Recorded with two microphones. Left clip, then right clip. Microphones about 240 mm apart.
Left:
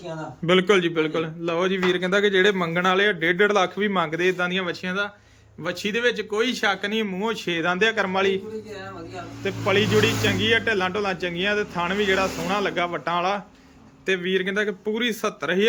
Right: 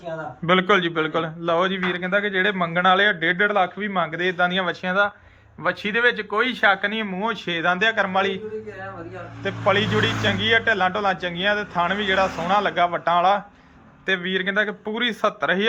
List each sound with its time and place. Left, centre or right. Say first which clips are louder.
0.4 s a man's voice: right 1 dB; centre
9.4 s a man's voice: right 2 dB; centre